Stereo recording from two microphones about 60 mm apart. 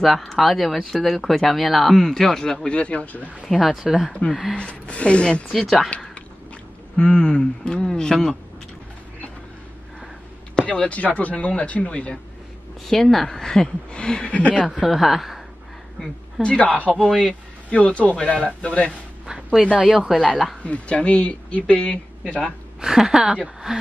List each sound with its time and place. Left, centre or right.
0.0 s speech: centre; by 3.3 s left
3.4 s speech: centre
4.6 s speech: centre
5.5 s speech: centre
7.0 s a woman's voice: centre
10.6 s speech: left
12.8 s a woman's voice: centre
14.7 s a woman's voice: centre
16.5 s a woman's voice: left
19.2 s a sound: centre
20.1 s speech: centre
20.6 s speech: left
22.8 s a woman's voice: centre